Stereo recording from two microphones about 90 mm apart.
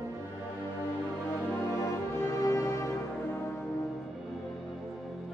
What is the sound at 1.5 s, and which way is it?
Music, 30° left (ahead or behind).